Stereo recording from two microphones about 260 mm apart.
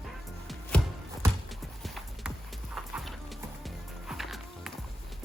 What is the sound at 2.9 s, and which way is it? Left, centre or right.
Music, centre.